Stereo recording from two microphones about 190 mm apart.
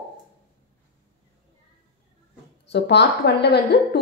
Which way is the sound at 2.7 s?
65° left (ahead or behind).